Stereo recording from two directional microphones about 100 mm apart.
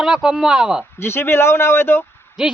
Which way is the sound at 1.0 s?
25° left (ahead or behind).